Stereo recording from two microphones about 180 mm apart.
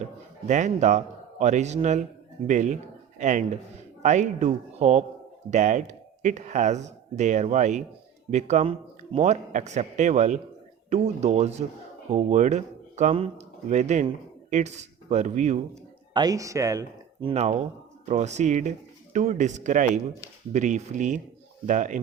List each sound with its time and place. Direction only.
0.4 s a man's voice: 40° right (ahead or behind)
16.1 s a man's voice: 20° right (ahead or behind); by 22.0 s 45° right (ahead or behind)